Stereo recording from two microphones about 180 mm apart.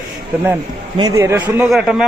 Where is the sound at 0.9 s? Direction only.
20° right (ahead or behind).